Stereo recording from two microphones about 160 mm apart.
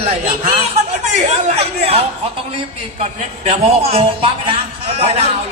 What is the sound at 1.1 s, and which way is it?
Speech, 40° right (ahead or behind).